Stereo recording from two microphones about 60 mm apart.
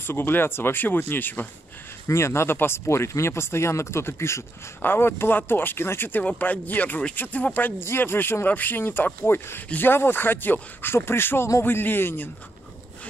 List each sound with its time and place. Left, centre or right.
0.0 s speech: left
2.0 s speech: left